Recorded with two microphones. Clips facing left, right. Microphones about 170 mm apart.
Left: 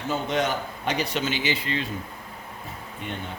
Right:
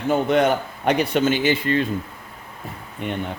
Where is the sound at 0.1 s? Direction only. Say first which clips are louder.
Right 8 dB; 55° right (ahead or behind).